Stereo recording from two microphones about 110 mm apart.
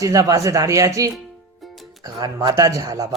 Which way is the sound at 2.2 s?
35° right (ahead or behind).